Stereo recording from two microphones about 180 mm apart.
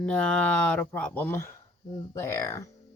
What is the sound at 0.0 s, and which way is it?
Speech, 5° left (ahead or behind).